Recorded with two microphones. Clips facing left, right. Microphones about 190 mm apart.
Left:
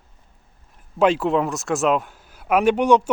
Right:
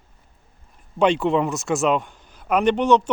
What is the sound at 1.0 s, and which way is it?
A man's voice, centre (ahead or behind).